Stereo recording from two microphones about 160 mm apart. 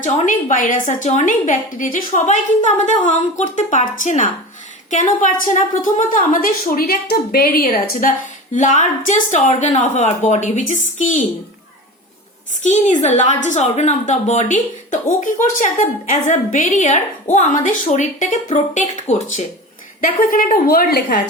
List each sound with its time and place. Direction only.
0.0 s a woman's voice: 55° left (ahead or behind)
8.5 s a woman's voice: 50° left (ahead or behind)
12.6 s a woman's voice: 45° left (ahead or behind); by 21.2 s 75° left (ahead or behind)